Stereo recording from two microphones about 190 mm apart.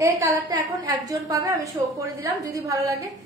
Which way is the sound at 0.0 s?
15° right (ahead or behind).